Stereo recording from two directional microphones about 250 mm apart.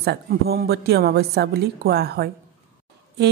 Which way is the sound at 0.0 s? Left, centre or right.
Right.